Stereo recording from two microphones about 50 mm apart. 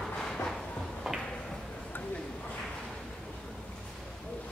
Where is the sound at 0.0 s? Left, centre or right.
Centre.